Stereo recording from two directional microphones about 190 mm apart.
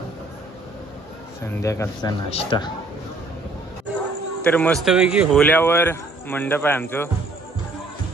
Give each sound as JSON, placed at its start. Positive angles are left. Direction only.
{"t": 1.4, "sound": "a man's voice", "side_deg": 15}
{"t": 2.2, "sound": "a man's voice", "side_deg": 30}
{"t": 4.4, "sound": "speech", "side_deg": 5}
{"t": 5.4, "sound": "a man's voice", "side_deg": 10}